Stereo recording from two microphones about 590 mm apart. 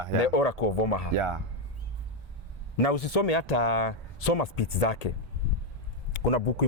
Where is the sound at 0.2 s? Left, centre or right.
Left.